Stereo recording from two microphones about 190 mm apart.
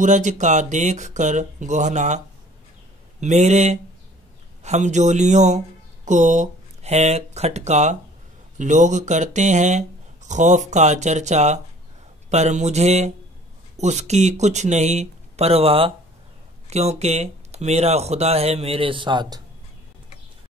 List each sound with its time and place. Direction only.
0.0 s speech: 40° right (ahead or behind); by 19.4 s 20° right (ahead or behind)